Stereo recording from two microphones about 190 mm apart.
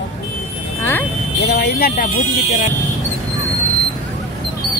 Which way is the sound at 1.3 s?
60° left (ahead or behind).